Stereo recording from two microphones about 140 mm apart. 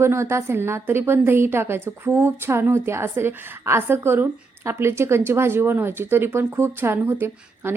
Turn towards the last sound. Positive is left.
turn(degrees=-15)  # may be behind; listen again after turning